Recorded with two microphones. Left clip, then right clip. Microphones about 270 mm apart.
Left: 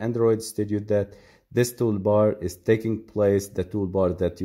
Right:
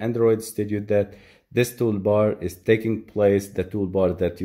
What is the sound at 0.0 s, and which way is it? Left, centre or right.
Speech, centre.